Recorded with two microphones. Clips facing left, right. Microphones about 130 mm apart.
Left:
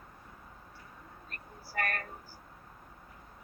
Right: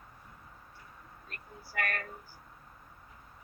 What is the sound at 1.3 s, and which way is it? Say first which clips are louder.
Speech: left 1 dB; 40° left (ahead or behind).